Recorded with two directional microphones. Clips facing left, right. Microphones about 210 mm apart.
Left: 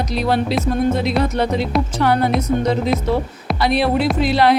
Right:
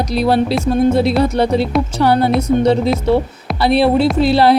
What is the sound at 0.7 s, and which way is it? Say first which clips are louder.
A woman's voice: right 6 dB; 35° right (ahead or behind).